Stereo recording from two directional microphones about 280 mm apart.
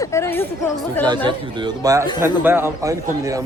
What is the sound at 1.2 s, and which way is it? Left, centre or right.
A man's voice, centre.